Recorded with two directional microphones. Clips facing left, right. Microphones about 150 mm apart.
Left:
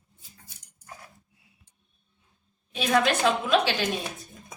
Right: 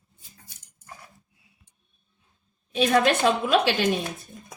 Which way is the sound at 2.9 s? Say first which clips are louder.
Right 1 dB; 45° right (ahead or behind).